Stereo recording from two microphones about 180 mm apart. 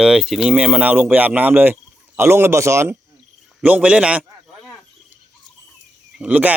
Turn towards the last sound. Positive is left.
turn(degrees=-5)  # may be behind; listen again after turning